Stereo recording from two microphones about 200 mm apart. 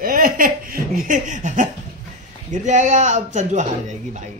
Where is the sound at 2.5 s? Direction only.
40° right (ahead or behind).